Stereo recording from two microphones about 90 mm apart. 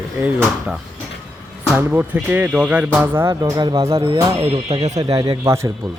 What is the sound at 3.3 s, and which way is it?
Speech, 40° right (ahead or behind).